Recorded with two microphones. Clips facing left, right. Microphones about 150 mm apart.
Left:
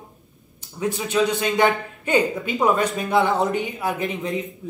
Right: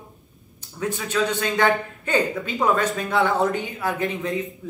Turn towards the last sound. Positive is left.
turn(degrees=15)  # may be behind; listen again after turning